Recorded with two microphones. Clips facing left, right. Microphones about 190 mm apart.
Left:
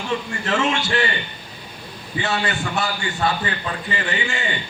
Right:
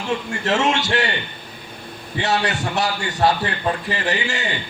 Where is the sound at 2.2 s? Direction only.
40° right (ahead or behind).